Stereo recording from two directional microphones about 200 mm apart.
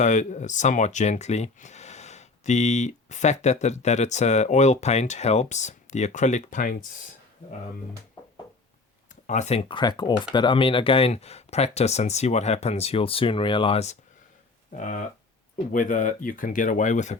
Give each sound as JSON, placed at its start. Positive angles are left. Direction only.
{"t": 0.0, "sound": "speech", "side_deg": 40}
{"t": 9.2, "sound": "speech", "side_deg": 35}